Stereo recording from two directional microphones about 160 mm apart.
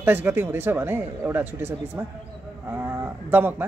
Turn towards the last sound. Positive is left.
turn(degrees=-15)  # may be behind; listen again after turning